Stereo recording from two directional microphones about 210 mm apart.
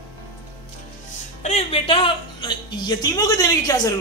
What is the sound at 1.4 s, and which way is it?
A man's voice, 30° left (ahead or behind).